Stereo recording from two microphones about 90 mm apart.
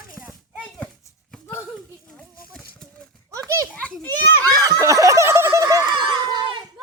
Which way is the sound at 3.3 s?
35° right (ahead or behind).